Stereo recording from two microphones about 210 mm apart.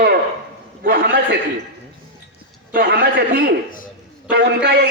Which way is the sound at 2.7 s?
45° right (ahead or behind).